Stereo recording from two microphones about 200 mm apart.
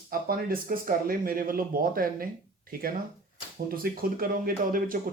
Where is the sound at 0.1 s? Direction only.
45° right (ahead or behind).